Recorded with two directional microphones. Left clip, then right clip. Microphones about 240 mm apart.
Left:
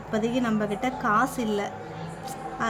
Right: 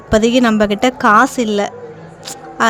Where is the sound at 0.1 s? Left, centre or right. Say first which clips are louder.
Right 15 dB; right.